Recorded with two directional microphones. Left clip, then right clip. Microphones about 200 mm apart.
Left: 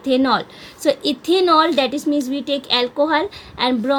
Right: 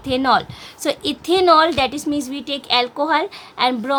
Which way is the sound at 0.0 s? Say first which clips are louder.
Even; 20° right (ahead or behind).